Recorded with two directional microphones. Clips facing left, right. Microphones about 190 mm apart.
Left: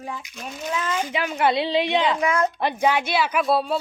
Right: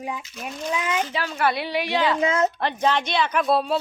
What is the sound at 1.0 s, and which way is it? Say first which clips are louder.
A woman's voice: left 2 dB; 15° left (ahead or behind).